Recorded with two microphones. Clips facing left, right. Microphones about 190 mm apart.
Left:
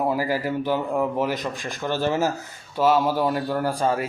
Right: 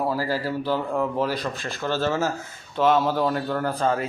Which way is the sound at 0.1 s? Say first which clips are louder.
Left 2 dB; 15° left (ahead or behind).